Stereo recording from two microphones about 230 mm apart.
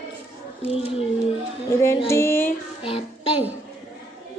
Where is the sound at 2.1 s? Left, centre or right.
Centre.